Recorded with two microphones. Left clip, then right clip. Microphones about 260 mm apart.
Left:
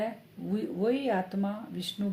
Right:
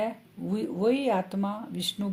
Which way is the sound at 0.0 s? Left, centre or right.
Right.